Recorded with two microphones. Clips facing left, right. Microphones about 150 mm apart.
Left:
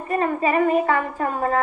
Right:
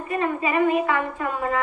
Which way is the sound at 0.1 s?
40° left (ahead or behind).